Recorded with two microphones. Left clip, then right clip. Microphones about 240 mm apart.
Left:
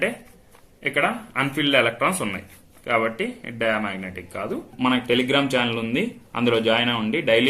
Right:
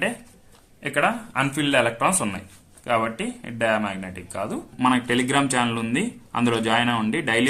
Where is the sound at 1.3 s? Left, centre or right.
Right.